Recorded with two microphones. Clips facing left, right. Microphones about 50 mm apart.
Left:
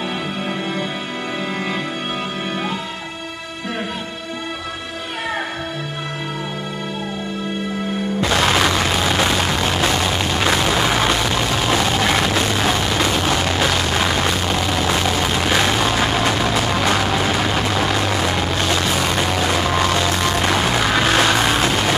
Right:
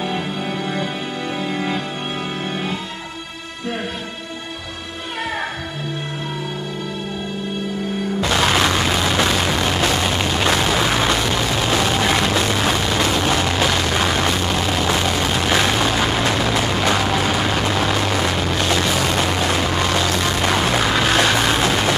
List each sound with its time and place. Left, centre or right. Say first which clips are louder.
8.2 s music: left 1 dB; centre